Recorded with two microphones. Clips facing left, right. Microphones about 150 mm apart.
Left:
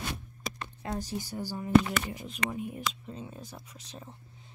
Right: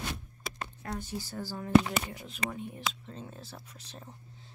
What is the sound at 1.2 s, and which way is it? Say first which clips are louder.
Speech: left 2 dB; 15° left (ahead or behind).